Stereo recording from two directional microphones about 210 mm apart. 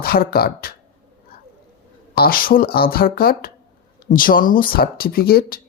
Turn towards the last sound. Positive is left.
turn(degrees=45)  # may be behind; listen again after turning